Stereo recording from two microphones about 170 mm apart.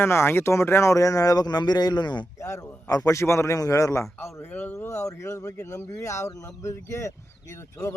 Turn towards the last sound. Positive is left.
turn(degrees=20)  # may be behind; listen again after turning